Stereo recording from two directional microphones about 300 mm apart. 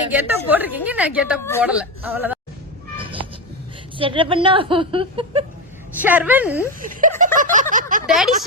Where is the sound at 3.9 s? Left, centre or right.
Centre.